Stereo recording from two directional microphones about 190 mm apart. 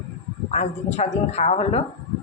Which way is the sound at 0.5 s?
35° left (ahead or behind).